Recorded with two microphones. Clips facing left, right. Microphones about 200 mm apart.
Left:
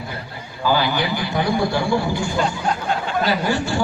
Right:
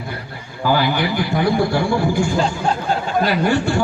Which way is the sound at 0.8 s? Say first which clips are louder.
Right 2 dB; 55° right (ahead or behind).